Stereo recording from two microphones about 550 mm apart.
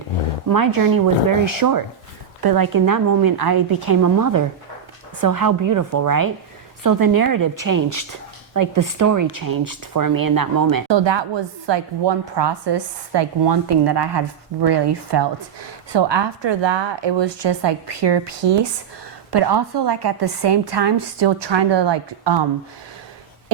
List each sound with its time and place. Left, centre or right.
0.5 s a woman's voice: right